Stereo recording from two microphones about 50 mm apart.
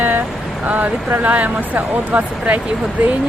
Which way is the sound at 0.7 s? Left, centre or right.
Right.